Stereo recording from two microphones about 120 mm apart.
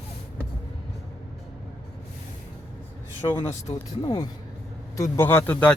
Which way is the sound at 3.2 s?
20° left (ahead or behind).